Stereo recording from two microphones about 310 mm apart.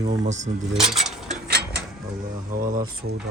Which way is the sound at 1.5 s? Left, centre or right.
Right.